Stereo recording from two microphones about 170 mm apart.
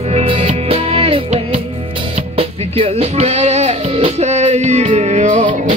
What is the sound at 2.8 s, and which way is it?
Music, 35° right (ahead or behind).